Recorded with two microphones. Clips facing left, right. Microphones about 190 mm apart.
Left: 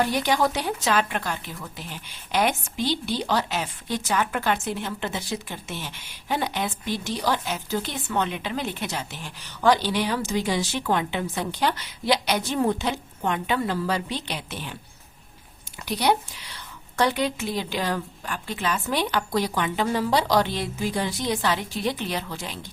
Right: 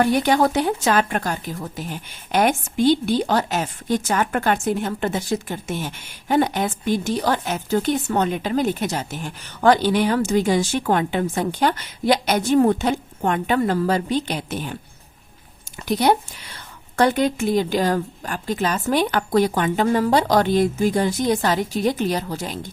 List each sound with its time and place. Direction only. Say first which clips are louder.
0.0 s speech: right 5 dB; 50° right (ahead or behind)
15.9 s speech: right 5 dB; 50° right (ahead or behind)